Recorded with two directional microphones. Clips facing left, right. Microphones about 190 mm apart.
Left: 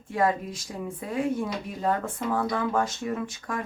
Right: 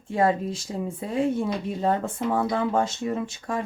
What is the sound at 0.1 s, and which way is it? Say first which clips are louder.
Speech: right 3 dB; 25° right (ahead or behind).